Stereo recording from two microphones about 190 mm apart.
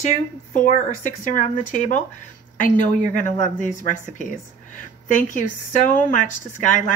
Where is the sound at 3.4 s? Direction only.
40° left (ahead or behind).